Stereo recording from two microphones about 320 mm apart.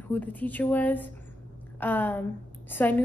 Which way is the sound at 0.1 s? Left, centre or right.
Centre.